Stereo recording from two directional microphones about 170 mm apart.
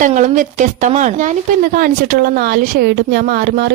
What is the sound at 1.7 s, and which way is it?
Speech, 60° right (ahead or behind).